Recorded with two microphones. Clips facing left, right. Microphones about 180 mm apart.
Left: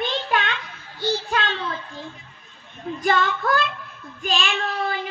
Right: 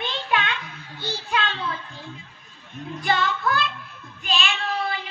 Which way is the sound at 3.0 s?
45° left (ahead or behind).